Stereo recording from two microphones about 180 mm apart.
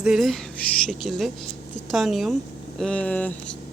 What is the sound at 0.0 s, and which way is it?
Speech, centre (ahead or behind).